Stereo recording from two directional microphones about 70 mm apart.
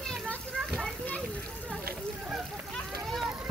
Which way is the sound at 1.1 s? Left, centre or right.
Centre.